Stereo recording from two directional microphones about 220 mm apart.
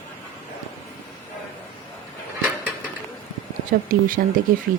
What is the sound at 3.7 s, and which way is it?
Speech, 40° right (ahead or behind).